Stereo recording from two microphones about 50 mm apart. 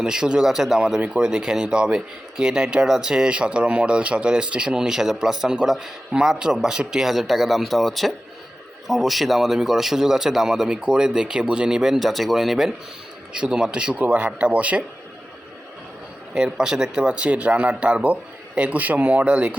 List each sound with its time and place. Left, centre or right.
0.0 s speech: centre
1.0 s speech: right
16.3 s speech: centre